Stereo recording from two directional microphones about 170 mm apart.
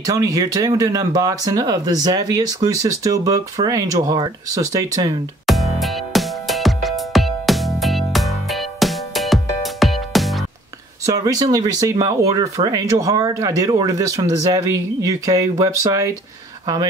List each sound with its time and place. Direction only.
0.0 s speech: 20° right (ahead or behind)
5.5 s music: centre (ahead or behind)
11.1 s speech: 20° right (ahead or behind)